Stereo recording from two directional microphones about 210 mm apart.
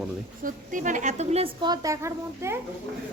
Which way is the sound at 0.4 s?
40° right (ahead or behind).